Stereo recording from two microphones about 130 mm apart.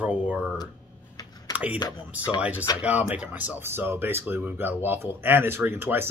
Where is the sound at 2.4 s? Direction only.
10° right (ahead or behind).